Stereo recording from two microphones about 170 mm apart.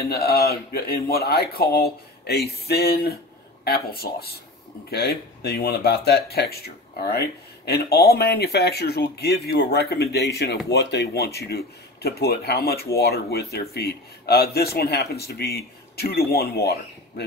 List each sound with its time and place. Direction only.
0.1 s speech: 65° left (ahead or behind)
10.7 s speech: 90° left; by 16.7 s 65° left (ahead or behind)